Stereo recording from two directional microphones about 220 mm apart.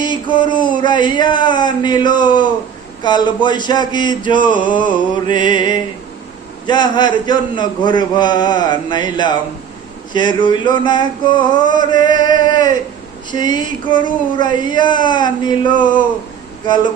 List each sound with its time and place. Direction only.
0.0 s a man's voice: 20° left (ahead or behind)